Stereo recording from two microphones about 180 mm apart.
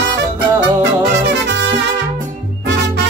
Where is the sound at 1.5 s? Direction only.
75° right (ahead or behind).